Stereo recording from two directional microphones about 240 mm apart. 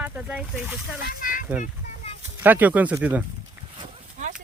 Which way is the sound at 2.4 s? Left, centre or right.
Centre.